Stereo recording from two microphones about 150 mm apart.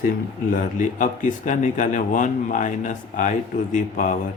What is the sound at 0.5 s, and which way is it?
Speech, 60° left (ahead or behind).